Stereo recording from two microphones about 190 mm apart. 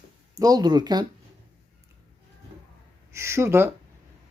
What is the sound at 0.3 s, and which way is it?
Speech, 20° right (ahead or behind).